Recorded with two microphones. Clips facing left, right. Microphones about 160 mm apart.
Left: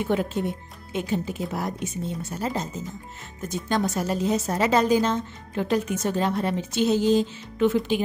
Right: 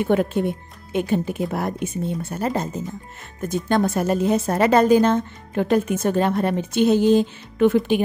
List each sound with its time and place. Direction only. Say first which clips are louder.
0.0 s speech: right 5 dB; 55° right (ahead or behind)